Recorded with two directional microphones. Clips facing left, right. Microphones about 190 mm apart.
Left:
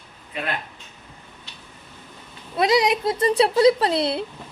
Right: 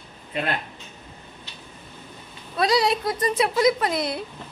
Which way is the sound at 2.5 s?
20° left (ahead or behind).